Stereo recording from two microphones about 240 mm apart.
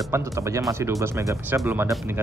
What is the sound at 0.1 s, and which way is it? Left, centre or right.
Speech, centre.